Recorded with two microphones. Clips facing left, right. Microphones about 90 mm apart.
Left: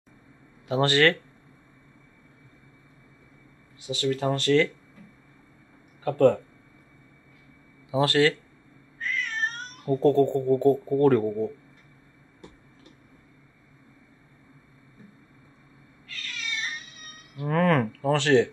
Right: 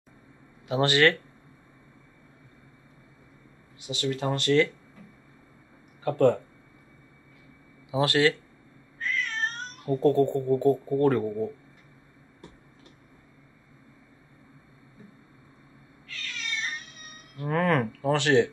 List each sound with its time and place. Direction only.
0.7 s speech: 20° right (ahead or behind)
3.8 s speech: 20° right (ahead or behind)
6.0 s speech: 20° right (ahead or behind)
7.9 s speech: 20° right (ahead or behind)
9.0 s cat: 5° left (ahead or behind)
10.0 s speech: 15° right (ahead or behind)
16.1 s cat: 5° left (ahead or behind)
17.5 s speech: 15° right (ahead or behind)